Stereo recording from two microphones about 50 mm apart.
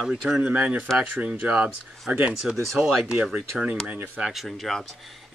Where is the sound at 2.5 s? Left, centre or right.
Centre.